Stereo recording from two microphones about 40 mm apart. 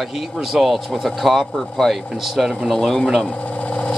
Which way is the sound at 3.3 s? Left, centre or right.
Left.